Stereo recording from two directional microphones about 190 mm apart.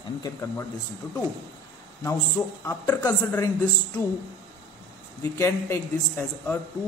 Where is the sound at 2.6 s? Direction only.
20° left (ahead or behind).